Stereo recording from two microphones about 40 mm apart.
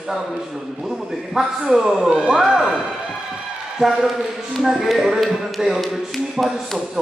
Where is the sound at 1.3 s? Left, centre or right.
Centre.